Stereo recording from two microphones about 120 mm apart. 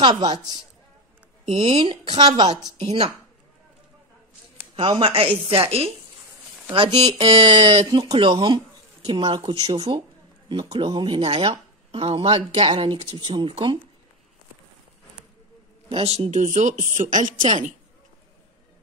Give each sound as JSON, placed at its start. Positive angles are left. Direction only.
{"t": 0.0, "sound": "a woman's voice", "side_deg": -35}
{"t": 1.5, "sound": "speech", "side_deg": -50}
{"t": 2.1, "sound": "a woman's voice", "side_deg": -35}
{"t": 2.8, "sound": "speech", "side_deg": -50}
{"t": 4.7, "sound": "speech", "side_deg": -50}
{"t": 7.1, "sound": "a woman's voice", "side_deg": -45}
{"t": 15.9, "sound": "a woman's voice", "side_deg": -55}